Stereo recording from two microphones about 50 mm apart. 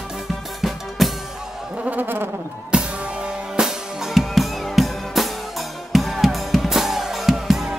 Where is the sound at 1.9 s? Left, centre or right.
Right.